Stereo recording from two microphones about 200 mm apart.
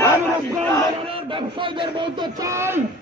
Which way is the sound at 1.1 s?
25° right (ahead or behind).